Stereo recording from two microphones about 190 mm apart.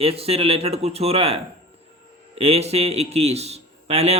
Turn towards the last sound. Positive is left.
turn(degrees=-35)  # may be behind; listen again after turning